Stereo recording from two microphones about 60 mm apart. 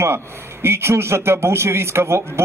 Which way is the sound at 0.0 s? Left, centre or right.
Right.